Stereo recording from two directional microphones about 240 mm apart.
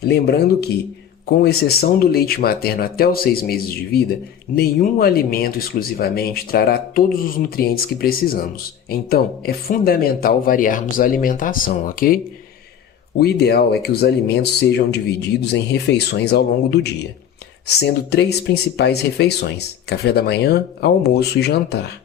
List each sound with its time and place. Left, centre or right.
0.0 s speech: left